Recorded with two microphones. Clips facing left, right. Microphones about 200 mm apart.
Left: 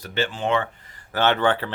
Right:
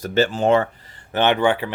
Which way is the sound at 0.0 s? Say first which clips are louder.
Right 7 dB; 45° right (ahead or behind).